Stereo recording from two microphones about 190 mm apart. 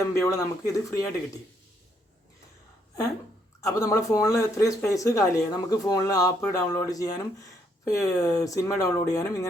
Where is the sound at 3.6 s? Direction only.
15° left (ahead or behind).